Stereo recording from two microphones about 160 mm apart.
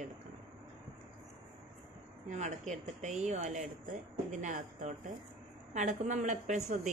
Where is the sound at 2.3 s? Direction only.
50° right (ahead or behind).